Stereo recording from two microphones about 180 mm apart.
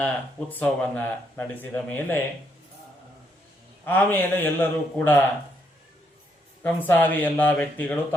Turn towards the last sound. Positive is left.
turn(degrees=10)  # may be behind; listen again after turning